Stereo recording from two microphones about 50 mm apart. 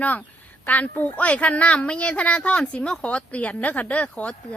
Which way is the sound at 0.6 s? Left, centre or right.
Left.